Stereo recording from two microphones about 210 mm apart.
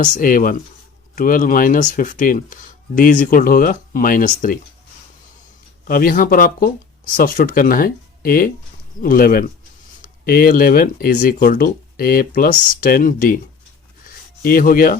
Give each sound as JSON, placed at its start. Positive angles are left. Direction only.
{"t": 0.0, "sound": "speech", "side_deg": 40}
{"t": 5.9, "sound": "speech", "side_deg": 40}
{"t": 14.4, "sound": "speech", "side_deg": 40}